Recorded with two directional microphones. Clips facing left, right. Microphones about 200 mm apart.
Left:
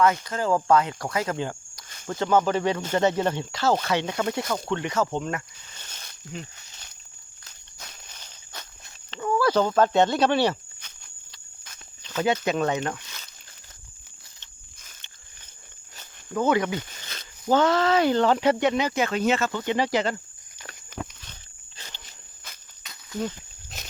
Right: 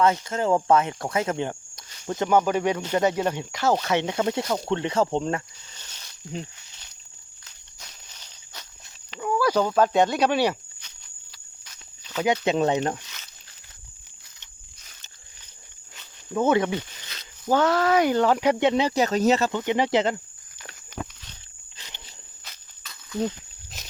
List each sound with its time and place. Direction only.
0.0 s speech: 25° right (ahead or behind)
5.7 s snake: 50° left (ahead or behind)
7.8 s walk: 55° left (ahead or behind)
9.0 s speech: 10° right (ahead or behind)
10.8 s cricket: 50° left (ahead or behind)
12.0 s speech: 15° right (ahead or behind)
12.5 s speech: 25° right (ahead or behind)
16.3 s speech: 25° right (ahead or behind)
17.0 s zipper: 50° left (ahead or behind)
17.5 s speech: 5° right (ahead or behind)
18.6 s speech: 30° right (ahead or behind)
19.5 s speech: 15° right (ahead or behind)